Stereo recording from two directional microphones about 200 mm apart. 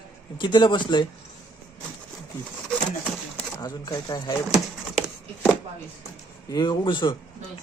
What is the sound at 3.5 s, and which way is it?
Speech, 20° left (ahead or behind).